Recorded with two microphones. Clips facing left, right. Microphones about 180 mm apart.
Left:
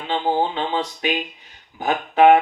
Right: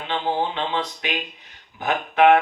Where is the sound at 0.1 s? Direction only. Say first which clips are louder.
Left 3 dB; 40° left (ahead or behind).